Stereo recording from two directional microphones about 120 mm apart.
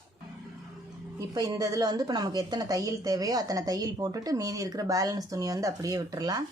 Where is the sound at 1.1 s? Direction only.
30° right (ahead or behind).